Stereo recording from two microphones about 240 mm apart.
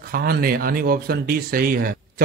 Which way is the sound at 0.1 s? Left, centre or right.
Right.